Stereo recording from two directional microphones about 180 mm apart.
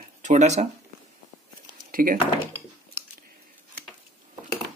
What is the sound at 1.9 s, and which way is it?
Speech, 50° right (ahead or behind).